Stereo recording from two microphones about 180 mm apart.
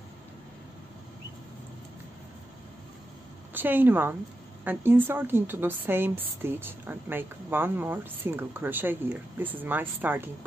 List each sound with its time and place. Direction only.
3.5 s a woman's voice: 10° right (ahead or behind)